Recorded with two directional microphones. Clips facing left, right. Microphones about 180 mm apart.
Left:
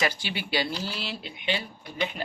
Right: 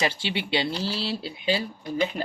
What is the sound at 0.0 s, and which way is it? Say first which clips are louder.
Speech: right 2 dB; 25° right (ahead or behind).